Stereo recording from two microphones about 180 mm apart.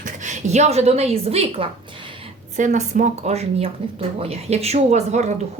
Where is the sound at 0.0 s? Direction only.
40° right (ahead or behind).